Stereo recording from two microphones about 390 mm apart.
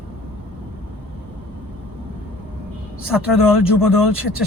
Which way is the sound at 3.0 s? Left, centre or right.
Centre.